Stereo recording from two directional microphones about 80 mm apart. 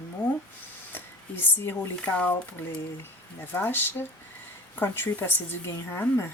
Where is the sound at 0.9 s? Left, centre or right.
Left.